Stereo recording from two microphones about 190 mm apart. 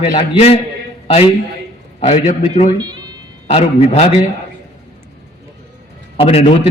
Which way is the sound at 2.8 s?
20° right (ahead or behind).